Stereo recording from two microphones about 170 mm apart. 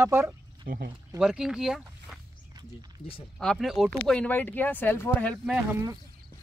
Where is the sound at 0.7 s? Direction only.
60° right (ahead or behind).